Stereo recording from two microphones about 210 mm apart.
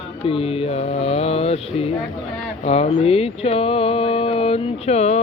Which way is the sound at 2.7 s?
30° left (ahead or behind).